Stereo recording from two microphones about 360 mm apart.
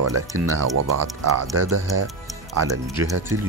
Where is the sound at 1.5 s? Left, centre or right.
Right.